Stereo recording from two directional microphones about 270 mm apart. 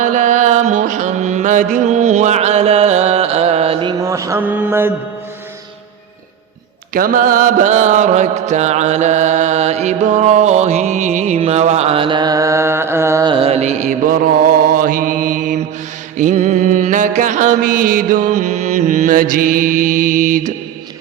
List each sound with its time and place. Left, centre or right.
0.0 s music: right; by 4.9 s centre
6.9 s mantra: right